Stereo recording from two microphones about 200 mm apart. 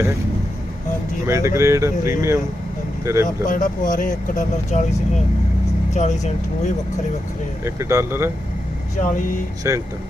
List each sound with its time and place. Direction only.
1.3 s speech: 15° right (ahead or behind)
3.2 s speech: 40° left (ahead or behind)
5.9 s speech: 35° left (ahead or behind)
7.6 s speech: 15° right (ahead or behind)
9.7 s speech: 15° right (ahead or behind)